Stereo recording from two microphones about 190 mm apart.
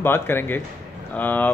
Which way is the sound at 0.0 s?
10° left (ahead or behind).